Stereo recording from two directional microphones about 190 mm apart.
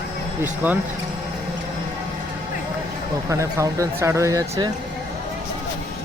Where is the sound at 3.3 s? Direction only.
15° right (ahead or behind).